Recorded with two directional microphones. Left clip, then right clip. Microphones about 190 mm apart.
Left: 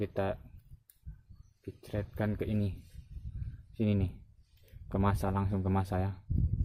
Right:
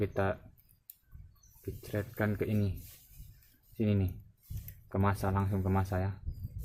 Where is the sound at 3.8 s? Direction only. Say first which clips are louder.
Even; 35° left (ahead or behind).